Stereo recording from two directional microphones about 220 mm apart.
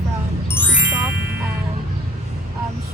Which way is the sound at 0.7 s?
5° right (ahead or behind).